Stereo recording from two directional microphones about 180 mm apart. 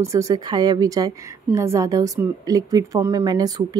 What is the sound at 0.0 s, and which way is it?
A woman's voice, 15° right (ahead or behind).